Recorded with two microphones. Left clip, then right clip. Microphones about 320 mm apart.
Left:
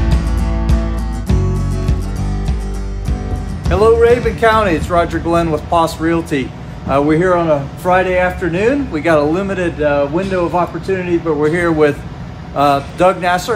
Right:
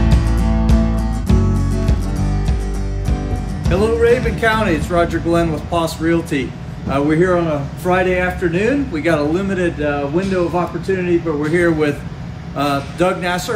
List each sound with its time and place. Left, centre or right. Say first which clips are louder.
0.1 s music: right 1 dB; centre
3.7 s speech: left 4 dB; centre